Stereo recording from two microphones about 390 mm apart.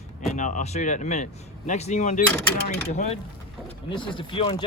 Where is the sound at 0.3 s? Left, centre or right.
Centre.